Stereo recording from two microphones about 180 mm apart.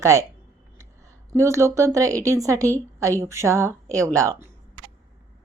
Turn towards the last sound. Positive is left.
turn(degrees=-15)  # may be behind; listen again after turning